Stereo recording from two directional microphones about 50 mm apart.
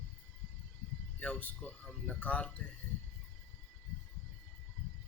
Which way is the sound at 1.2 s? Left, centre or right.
Left.